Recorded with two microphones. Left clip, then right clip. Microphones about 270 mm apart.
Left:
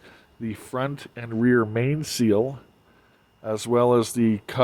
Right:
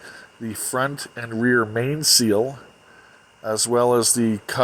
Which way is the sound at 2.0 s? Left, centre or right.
Centre.